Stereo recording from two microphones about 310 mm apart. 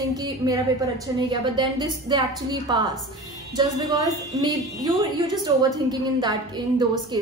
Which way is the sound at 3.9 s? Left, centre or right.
Centre.